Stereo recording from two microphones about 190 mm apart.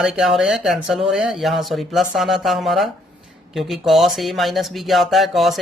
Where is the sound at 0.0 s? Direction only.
Centre (ahead or behind).